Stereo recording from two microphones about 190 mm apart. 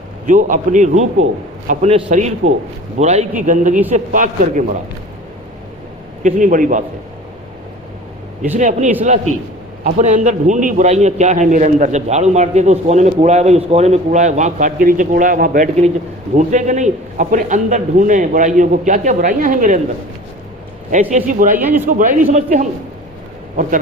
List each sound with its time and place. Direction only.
0.3 s a man's voice: 40° right (ahead or behind)
6.2 s a man's voice: 45° right (ahead or behind)
8.5 s a man's voice: 40° right (ahead or behind)
20.9 s a man's voice: 40° right (ahead or behind)
21.5 s a man's voice: 10° right (ahead or behind)
21.8 s a man's voice: 45° right (ahead or behind)